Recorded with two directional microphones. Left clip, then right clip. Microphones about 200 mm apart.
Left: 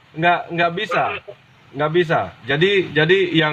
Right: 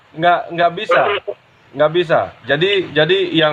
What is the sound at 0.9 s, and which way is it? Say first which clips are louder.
Speech: right 6 dB; 35° right (ahead or behind).